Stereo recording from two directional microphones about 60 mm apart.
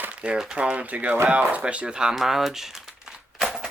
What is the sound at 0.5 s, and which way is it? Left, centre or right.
Speech, right.